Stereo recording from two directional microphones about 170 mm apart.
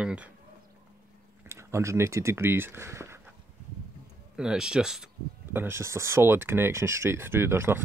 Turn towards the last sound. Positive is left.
turn(degrees=-15)  # may be behind; listen again after turning